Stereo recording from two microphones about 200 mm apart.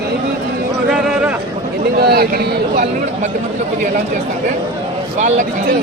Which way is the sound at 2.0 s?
50° right (ahead or behind).